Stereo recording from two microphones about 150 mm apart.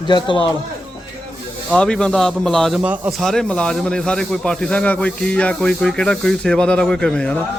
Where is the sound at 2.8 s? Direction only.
10° right (ahead or behind).